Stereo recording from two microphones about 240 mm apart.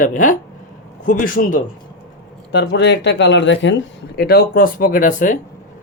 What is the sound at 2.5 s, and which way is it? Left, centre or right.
Speech, left.